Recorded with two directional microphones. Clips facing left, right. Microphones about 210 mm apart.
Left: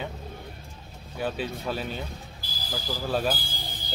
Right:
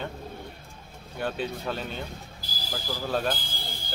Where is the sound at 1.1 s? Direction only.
5° left (ahead or behind).